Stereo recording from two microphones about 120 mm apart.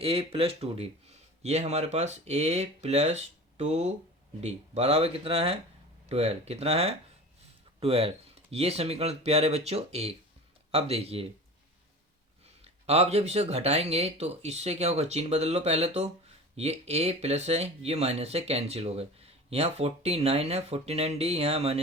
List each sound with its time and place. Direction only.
0.0 s speech: 55° right (ahead or behind)
12.6 s speech: 60° right (ahead or behind)